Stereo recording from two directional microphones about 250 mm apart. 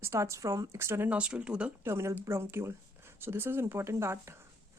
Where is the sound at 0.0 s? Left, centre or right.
Centre.